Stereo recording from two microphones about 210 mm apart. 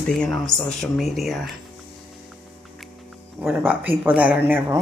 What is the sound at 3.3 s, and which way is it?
Speech, 5° right (ahead or behind).